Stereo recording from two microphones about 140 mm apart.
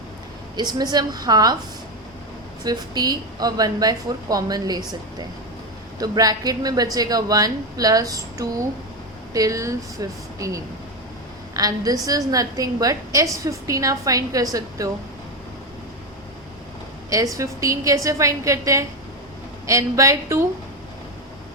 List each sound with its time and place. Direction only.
0.5 s a woman's voice: 30° right (ahead or behind)
2.6 s a woman's voice: 30° right (ahead or behind)
17.1 s a woman's voice: 25° right (ahead or behind)